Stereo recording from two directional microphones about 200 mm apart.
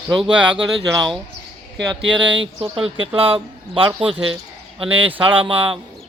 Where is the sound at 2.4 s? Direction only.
25° right (ahead or behind).